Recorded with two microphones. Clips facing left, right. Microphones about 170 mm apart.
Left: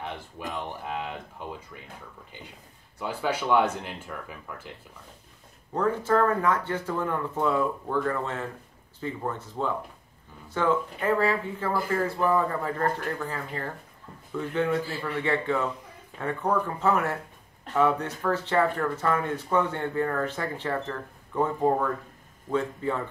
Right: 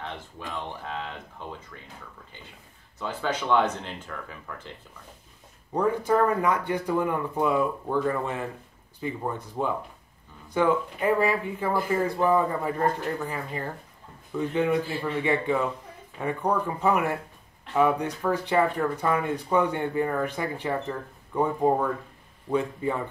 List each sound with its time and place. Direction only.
0.5 s a sound: 15° left (ahead or behind)
3.0 s speech: 10° left (ahead or behind)
5.7 s speech: 15° right (ahead or behind)